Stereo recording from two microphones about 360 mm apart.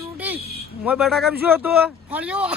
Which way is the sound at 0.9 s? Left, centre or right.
Centre.